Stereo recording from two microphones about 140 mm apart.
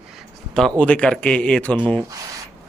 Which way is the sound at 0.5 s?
5° left (ahead or behind).